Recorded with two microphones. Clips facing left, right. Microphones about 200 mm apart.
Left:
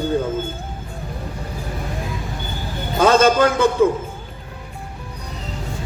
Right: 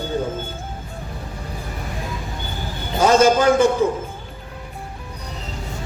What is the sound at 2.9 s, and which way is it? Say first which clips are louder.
Speech: even; 60° left (ahead or behind).